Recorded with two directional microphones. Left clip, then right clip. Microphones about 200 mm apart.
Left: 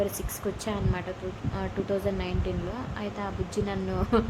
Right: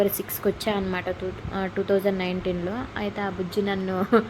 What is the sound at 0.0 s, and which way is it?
A woman's voice, 20° right (ahead or behind).